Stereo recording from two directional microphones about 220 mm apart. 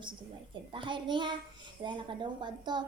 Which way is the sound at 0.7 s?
20° right (ahead or behind).